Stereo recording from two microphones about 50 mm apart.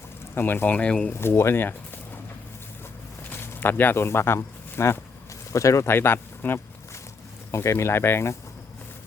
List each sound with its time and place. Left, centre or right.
0.3 s speech: left
0.8 s speech: left
1.1 s speech: left
3.3 s a sound: left
3.9 s speech: left
5.5 s speech: left
5.9 s speech: left
7.5 s speech: left